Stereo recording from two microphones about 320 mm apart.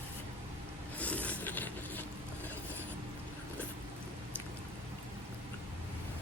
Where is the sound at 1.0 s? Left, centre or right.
Centre.